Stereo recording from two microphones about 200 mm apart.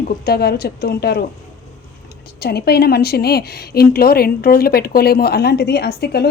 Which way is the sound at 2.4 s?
50° left (ahead or behind).